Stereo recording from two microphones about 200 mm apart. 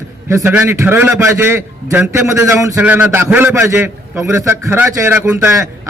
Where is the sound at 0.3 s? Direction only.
10° right (ahead or behind).